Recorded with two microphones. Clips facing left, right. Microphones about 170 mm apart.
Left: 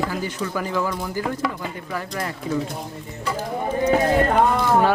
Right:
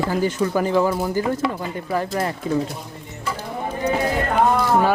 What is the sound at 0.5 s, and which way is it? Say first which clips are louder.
Speech: right 5 dB; 30° right (ahead or behind).